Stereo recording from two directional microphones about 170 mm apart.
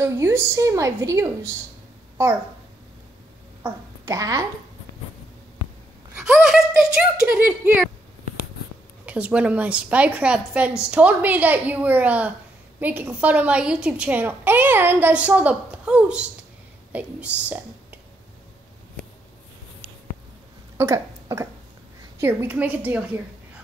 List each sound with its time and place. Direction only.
0.0 s a woman's voice: 15° right (ahead or behind)
3.6 s a woman's voice: 20° right (ahead or behind)
6.1 s speech: 5° right (ahead or behind)
9.0 s a woman's voice: 10° right (ahead or behind)
20.7 s a sound: 15° right (ahead or behind)
22.2 s a woman's voice: 15° right (ahead or behind)